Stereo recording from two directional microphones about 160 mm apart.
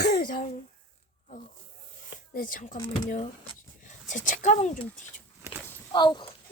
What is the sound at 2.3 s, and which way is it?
Speech, 60° left (ahead or behind).